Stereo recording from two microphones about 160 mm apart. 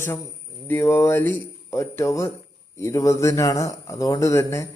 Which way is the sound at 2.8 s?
20° left (ahead or behind).